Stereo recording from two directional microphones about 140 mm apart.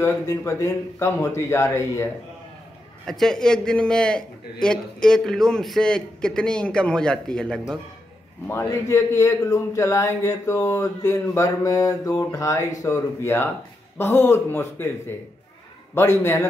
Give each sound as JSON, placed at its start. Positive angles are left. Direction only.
{"t": 0.0, "sound": "a man's voice", "side_deg": 20}
{"t": 3.1, "sound": "a man's voice", "side_deg": 5}
{"t": 8.5, "sound": "a man's voice", "side_deg": 20}
{"t": 16.2, "sound": "a man's voice", "side_deg": 20}